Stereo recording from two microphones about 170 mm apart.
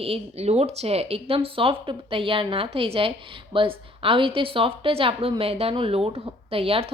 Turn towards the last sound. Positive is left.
turn(degrees=-35)  # may be behind; listen again after turning